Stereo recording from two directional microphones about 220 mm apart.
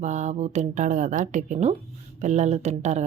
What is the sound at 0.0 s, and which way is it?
Speech, 35° right (ahead or behind).